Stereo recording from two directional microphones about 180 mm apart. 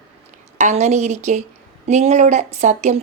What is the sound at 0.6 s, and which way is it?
Speech, 40° right (ahead or behind).